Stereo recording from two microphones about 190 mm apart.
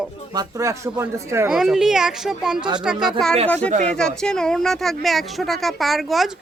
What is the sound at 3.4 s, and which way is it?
Speech, 5° left (ahead or behind).